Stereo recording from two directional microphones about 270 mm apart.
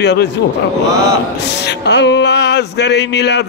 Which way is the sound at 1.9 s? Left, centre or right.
Left.